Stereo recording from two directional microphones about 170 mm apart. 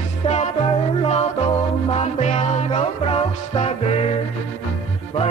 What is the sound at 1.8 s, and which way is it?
Music, 35° left (ahead or behind).